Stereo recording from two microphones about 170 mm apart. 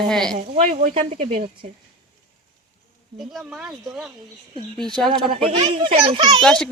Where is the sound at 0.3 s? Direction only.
40° right (ahead or behind).